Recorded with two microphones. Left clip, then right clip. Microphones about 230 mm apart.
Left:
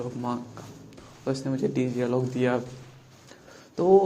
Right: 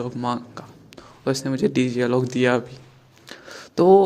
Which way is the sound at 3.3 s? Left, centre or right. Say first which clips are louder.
Right 9 dB; right.